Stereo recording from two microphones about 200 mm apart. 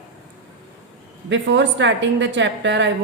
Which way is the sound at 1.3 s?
65° right (ahead or behind).